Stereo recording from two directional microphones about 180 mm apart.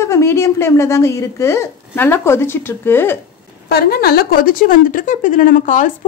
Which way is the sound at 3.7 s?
60° left (ahead or behind).